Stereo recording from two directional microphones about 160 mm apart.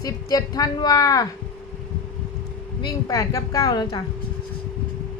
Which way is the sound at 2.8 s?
20° left (ahead or behind).